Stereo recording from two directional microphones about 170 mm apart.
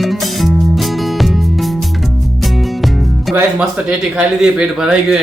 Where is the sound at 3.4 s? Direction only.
5° right (ahead or behind).